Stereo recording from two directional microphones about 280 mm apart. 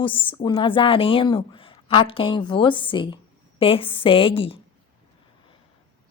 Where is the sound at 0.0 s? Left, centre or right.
Centre.